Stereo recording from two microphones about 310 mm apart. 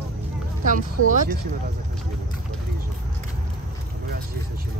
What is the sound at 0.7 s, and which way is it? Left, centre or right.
Speech, right.